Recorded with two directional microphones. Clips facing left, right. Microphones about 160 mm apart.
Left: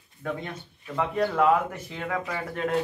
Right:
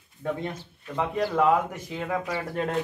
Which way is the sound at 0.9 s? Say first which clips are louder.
Even; 10° right (ahead or behind).